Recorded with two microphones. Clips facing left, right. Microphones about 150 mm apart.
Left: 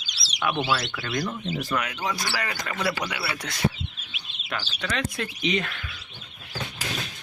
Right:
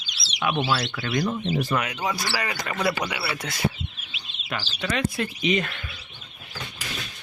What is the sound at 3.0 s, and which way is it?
Speech, 10° right (ahead or behind).